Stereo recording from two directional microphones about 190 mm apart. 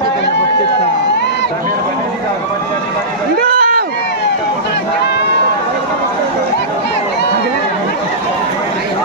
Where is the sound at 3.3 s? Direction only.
50° right (ahead or behind).